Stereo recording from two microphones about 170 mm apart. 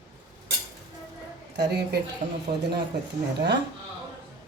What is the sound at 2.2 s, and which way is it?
Speech, 50° right (ahead or behind).